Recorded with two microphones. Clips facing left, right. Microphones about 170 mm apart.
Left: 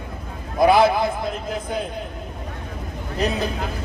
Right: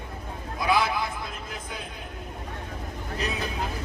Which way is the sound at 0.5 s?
65° left (ahead or behind).